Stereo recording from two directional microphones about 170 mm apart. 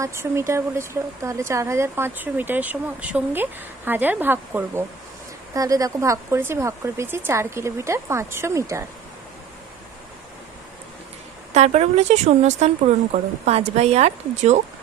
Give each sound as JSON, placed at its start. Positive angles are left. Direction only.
{"t": 0.0, "sound": "speech", "side_deg": -15}
{"t": 11.5, "sound": "speech", "side_deg": -40}